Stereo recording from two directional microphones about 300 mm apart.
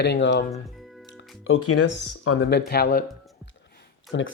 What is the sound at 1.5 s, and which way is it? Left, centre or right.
Speech, left.